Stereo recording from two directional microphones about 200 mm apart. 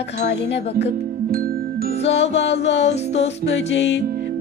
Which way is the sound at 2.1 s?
65° left (ahead or behind).